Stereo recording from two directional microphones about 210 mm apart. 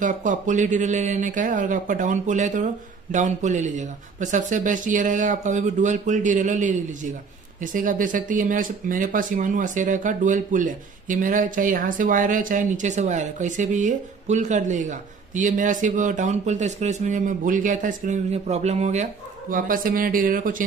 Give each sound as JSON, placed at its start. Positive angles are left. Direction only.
{"t": 0.0, "sound": "speech", "side_deg": -35}